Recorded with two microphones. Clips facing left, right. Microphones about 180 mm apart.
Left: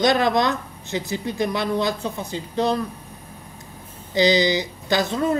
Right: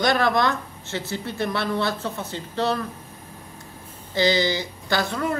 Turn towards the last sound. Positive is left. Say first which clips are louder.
# left 4 dB
turn(degrees=20)  # may be behind; listen again after turning